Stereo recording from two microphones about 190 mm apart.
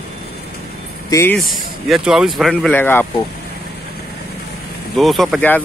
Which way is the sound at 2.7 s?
10° left (ahead or behind).